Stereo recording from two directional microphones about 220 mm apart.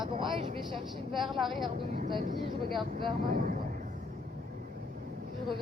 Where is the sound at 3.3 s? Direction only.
40° right (ahead or behind).